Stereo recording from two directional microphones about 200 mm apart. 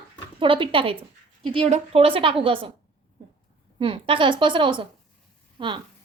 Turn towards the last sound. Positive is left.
turn(degrees=-25)  # may be behind; listen again after turning